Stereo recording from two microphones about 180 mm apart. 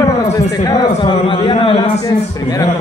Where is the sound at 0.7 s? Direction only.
25° left (ahead or behind).